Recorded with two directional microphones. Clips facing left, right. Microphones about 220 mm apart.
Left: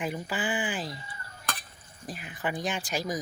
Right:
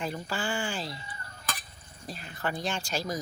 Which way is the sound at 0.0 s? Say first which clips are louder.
Left 1 dB; 15° left (ahead or behind).